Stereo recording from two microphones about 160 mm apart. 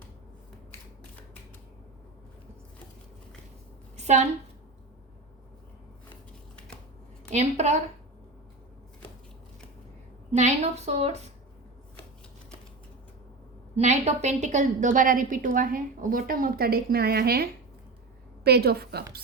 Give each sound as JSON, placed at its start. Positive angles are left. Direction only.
{"t": 3.9, "sound": "a sound", "side_deg": -45}
{"t": 7.3, "sound": "a woman's voice", "side_deg": -45}
{"t": 10.3, "sound": "a woman's voice", "side_deg": -45}
{"t": 13.7, "sound": "a woman's voice", "side_deg": -45}